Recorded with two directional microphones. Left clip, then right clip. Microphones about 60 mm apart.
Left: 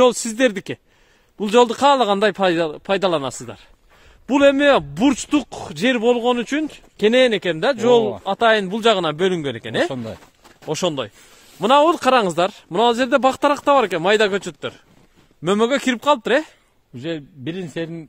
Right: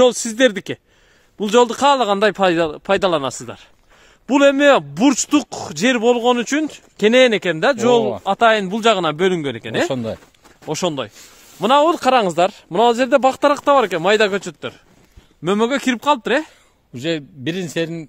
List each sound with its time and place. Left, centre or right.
0.0 s a man's voice: right
2.7 s a man's voice: right
4.9 s a man's voice: right; by 16.5 s centre